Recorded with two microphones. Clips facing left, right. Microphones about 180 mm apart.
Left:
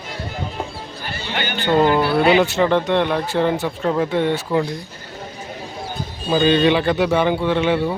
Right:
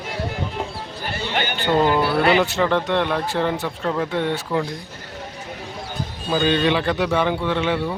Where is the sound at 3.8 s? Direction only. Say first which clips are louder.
Left 4 dB; 15° left (ahead or behind).